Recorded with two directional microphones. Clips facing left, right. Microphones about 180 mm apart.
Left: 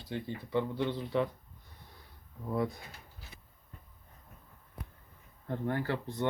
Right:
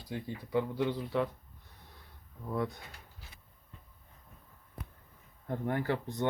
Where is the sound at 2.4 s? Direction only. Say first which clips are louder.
Left 2 dB; 5° left (ahead or behind).